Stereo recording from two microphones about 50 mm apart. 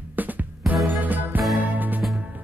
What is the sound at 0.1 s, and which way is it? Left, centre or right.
Music, right.